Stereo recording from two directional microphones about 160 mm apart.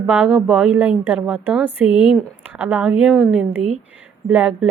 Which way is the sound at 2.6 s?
10° right (ahead or behind).